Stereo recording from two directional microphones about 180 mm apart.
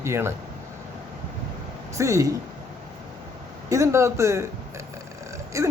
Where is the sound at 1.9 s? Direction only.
15° right (ahead or behind).